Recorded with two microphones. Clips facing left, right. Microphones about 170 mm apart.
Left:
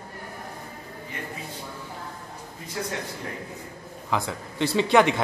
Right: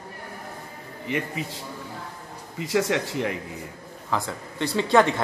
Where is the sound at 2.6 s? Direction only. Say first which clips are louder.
Right 9 dB; 90° right.